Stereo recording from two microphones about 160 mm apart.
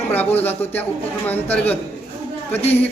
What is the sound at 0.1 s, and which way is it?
Speech, 10° left (ahead or behind).